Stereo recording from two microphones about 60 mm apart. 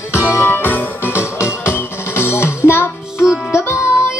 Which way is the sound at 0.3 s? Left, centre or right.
Left.